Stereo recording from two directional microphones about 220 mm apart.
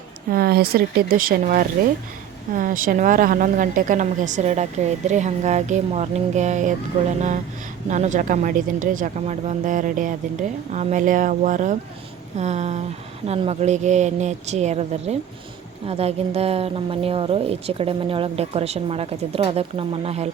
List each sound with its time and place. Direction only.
0.3 s a woman's voice: 45° right (ahead or behind)